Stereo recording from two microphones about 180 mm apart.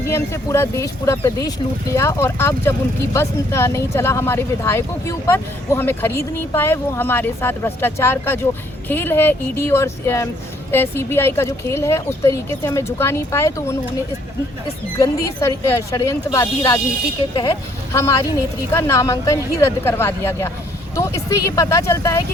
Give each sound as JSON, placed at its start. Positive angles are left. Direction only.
{"t": 0.1, "sound": "speech", "side_deg": 15}
{"t": 14.9, "sound": "speech", "side_deg": 20}
{"t": 17.9, "sound": "speech", "side_deg": 15}